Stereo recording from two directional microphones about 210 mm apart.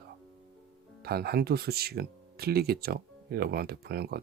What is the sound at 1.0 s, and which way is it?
Speech, 50° right (ahead or behind).